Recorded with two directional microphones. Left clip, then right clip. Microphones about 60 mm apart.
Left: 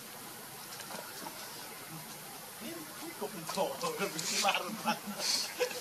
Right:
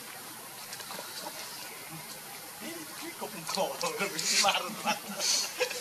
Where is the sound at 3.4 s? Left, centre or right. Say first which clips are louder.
Right 3 dB; right.